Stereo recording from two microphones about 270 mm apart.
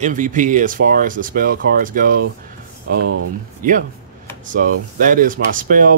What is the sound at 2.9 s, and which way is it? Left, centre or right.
Speech, right.